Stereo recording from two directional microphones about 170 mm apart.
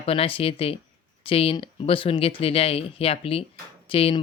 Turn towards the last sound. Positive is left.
turn(degrees=30)  # may be behind; listen again after turning